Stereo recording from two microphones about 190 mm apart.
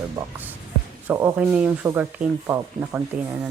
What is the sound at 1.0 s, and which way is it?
Speech, 10° right (ahead or behind).